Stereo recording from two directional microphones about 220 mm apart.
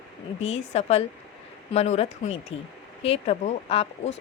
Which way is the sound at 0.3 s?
30° left (ahead or behind).